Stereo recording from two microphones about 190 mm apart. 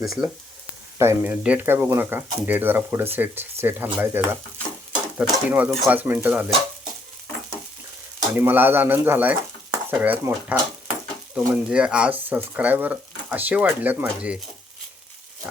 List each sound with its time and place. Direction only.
0.0 s speech: centre (ahead or behind)
8.3 s speech: 10° right (ahead or behind)